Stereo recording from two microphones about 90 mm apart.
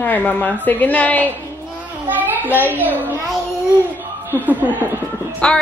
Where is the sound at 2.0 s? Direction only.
20° right (ahead or behind).